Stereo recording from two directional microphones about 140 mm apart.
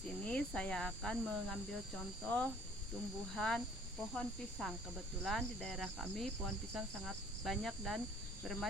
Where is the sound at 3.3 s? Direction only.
5° left (ahead or behind).